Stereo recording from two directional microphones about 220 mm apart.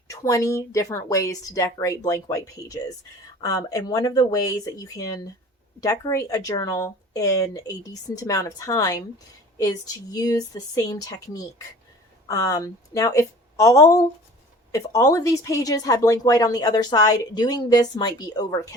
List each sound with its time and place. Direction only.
0.1 s speech: 15° left (ahead or behind)
12.3 s speech: 15° left (ahead or behind)